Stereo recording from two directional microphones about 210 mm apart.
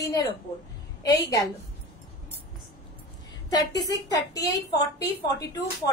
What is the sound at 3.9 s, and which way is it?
Speech, 15° left (ahead or behind).